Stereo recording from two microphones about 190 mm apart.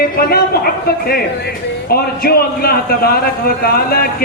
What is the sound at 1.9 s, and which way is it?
Speech, 55° left (ahead or behind).